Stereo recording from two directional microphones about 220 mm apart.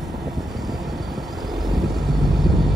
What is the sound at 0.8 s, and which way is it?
Vehicle, centre (ahead or behind).